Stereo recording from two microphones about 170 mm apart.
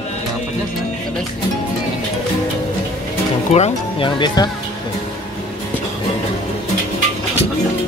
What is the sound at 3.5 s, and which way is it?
Speech, 40° left (ahead or behind).